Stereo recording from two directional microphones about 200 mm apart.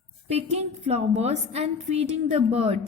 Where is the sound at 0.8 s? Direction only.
35° right (ahead or behind).